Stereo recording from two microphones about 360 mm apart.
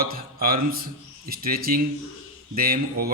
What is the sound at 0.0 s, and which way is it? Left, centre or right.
A man's voice, right.